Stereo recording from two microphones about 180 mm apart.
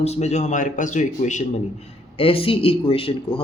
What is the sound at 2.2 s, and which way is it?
Speech, 30° left (ahead or behind).